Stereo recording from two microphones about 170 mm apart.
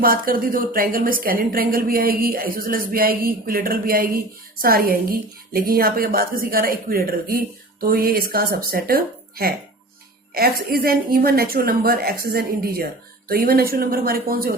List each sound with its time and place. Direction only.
0.0 s a woman's voice: 55° right (ahead or behind)